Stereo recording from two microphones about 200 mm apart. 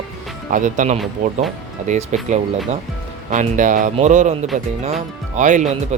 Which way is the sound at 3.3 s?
40° right (ahead or behind).